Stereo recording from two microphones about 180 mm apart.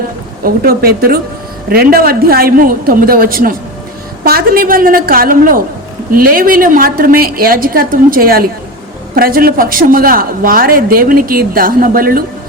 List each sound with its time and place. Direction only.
0.4 s a woman's voice: 55° right (ahead or behind)